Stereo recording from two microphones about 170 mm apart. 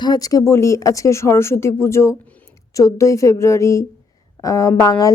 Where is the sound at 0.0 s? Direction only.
25° left (ahead or behind).